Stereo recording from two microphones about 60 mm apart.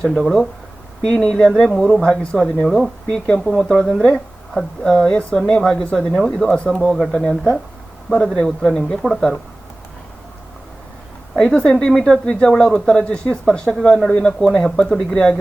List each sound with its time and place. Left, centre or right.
0.1 s speech: centre
2.0 s speech: centre
2.6 s speech: centre
6.1 s speech: centre
7.1 s speech: centre
11.3 s speech: centre